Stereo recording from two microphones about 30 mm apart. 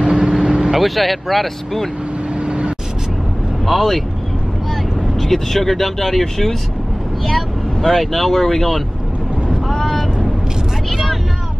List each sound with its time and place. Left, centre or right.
0.0 s vehicle: right
0.6 s speech: centre
2.4 s vehicle: right
3.6 s speech: centre
5.2 s speech: centre
7.8 s speech: centre
9.7 s vehicle: centre